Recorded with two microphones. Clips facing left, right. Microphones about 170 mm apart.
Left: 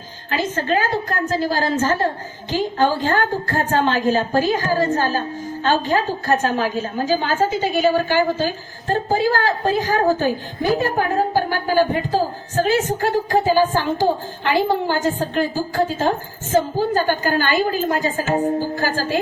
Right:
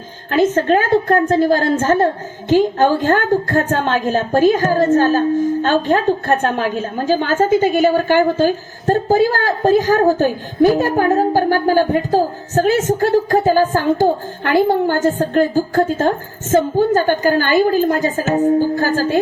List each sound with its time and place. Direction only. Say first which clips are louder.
0.3 s a woman's voice: right 8 dB; 50° right (ahead or behind)